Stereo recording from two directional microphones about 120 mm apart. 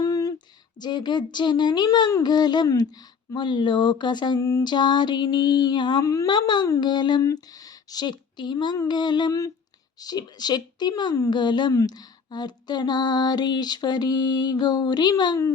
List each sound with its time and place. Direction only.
0.0 s a sound: 30° left (ahead or behind)
0.8 s a woman's voice: 35° left (ahead or behind)
4.4 s a woman's voice: 25° left (ahead or behind)
7.2 s speech: 25° left (ahead or behind)
7.9 s a woman's voice: 35° left (ahead or behind)